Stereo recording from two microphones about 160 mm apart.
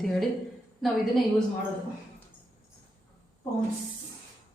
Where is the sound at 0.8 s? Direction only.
Centre (ahead or behind).